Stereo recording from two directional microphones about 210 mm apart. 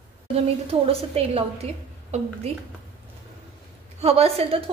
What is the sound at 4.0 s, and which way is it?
Speech, 30° right (ahead or behind).